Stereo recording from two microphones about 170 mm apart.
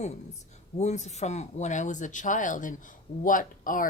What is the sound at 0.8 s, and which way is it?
A woman's voice, 40° left (ahead or behind).